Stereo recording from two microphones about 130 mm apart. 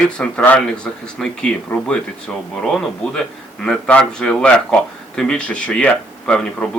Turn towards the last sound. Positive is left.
turn(degrees=5)  # may be behind; listen again after turning